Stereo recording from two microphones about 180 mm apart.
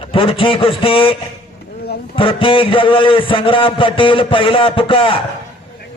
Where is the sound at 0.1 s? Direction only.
30° left (ahead or behind).